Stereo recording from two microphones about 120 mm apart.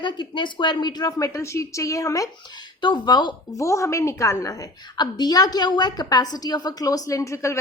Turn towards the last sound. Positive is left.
turn(degrees=25)  # may be behind; listen again after turning